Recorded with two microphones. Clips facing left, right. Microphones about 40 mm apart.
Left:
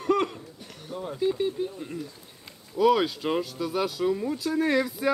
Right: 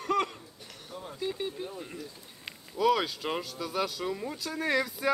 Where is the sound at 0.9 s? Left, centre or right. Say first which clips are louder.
Left 8 dB; centre.